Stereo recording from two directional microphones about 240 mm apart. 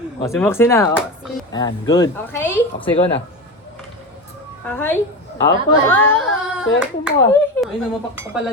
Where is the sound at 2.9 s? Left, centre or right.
Left.